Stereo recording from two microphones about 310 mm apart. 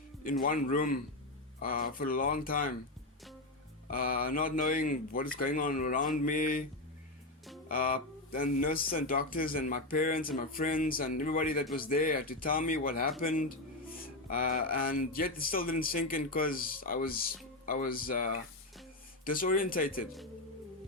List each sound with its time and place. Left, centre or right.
0.4 s speech: left
3.8 s speech: left
7.7 s speech: left